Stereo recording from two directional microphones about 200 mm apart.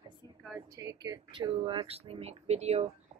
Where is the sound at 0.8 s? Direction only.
20° right (ahead or behind).